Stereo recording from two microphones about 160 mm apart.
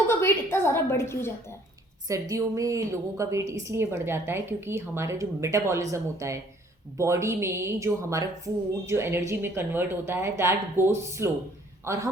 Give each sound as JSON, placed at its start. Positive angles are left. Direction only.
{"t": 0.1, "sound": "a woman's voice", "side_deg": 15}
{"t": 2.0, "sound": "a woman's voice", "side_deg": -20}